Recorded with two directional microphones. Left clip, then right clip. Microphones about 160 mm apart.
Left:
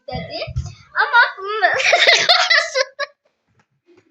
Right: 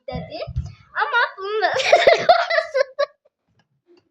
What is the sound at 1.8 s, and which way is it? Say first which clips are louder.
Giggle: even; 80° right.